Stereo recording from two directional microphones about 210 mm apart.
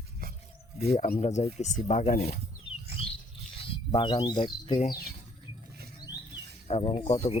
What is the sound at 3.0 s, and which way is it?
Rodents, 30° left (ahead or behind).